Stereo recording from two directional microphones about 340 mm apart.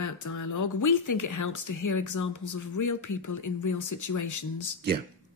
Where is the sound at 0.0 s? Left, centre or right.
Left.